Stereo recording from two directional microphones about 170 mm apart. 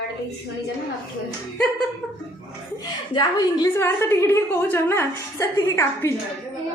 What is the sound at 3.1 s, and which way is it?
Speech, 25° left (ahead or behind).